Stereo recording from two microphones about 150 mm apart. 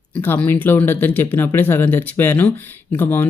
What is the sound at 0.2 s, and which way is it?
Speech, 10° left (ahead or behind).